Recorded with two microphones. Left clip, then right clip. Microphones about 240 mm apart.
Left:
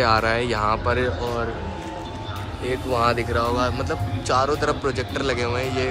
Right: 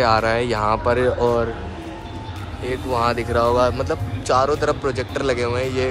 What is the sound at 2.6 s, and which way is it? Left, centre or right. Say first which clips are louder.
Speech: right 1 dB; centre.